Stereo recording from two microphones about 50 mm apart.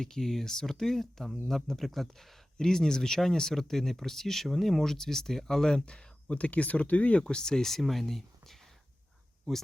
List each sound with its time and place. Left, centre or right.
0.0 s speech: centre; by 7.2 s left
7.2 s speech: centre